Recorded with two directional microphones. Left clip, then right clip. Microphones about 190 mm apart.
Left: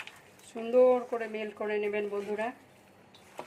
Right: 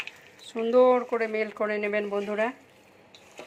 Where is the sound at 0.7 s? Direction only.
20° right (ahead or behind).